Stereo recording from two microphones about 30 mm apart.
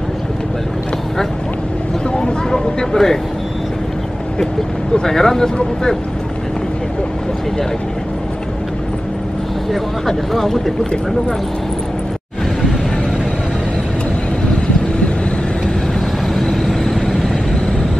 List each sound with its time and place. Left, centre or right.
2.5 s a sound: left
5.0 s speech: centre
9.7 s speech: centre
16.3 s vehicle: centre